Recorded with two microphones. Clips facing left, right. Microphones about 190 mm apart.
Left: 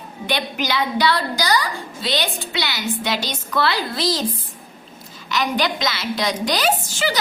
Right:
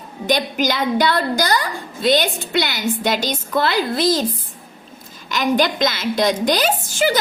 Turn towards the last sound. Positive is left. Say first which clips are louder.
# right 4 dB
turn(degrees=-50)  # may be behind; listen again after turning